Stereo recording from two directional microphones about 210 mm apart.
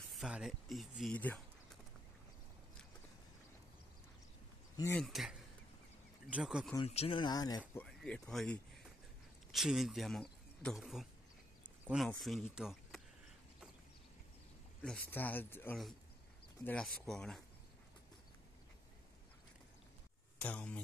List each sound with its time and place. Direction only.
0.1 s speech: centre (ahead or behind)
4.9 s speech: centre (ahead or behind)
6.3 s speech: 5° right (ahead or behind)
6.8 s speech: 30° left (ahead or behind)
7.8 s speech: 5° left (ahead or behind)
14.8 s speech: 5° left (ahead or behind)
20.3 s speech: 5° left (ahead or behind)